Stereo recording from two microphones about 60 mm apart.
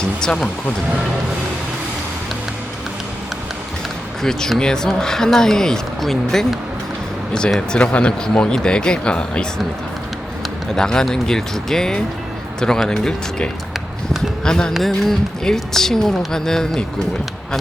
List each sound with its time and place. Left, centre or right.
0.2 s speech: centre
4.2 s speech: centre
7.7 s speech: centre
10.8 s speech: centre
14.4 s speech: centre